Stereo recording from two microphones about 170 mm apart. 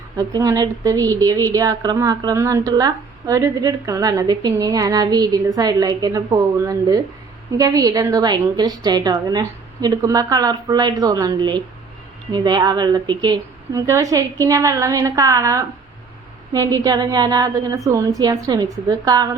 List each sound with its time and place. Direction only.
0.2 s a woman's voice: 20° right (ahead or behind)